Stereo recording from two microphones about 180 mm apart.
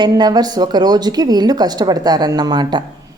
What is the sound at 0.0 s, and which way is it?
Speech, 20° right (ahead or behind).